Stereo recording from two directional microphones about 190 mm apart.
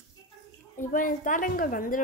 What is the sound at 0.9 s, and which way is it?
A woman's voice, 45° left (ahead or behind).